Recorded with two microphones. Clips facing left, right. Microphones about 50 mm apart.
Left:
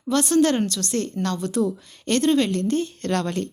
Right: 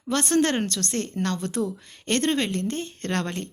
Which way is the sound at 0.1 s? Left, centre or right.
Right.